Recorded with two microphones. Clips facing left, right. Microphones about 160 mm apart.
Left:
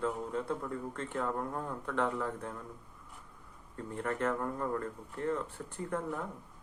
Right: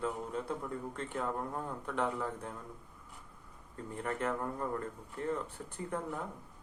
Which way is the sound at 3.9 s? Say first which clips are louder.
Left 2 dB; 15° right (ahead or behind).